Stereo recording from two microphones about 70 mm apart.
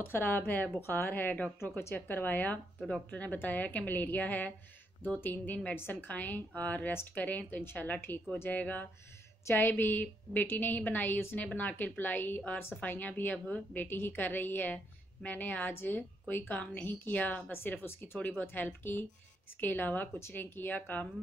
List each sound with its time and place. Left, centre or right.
0.0 s a woman's voice: left
1.6 s a woman's voice: left